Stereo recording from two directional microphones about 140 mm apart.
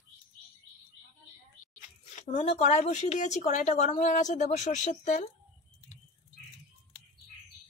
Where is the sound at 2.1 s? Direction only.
55° left (ahead or behind).